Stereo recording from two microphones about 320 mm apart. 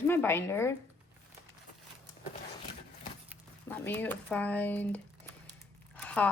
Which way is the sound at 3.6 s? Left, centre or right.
Centre.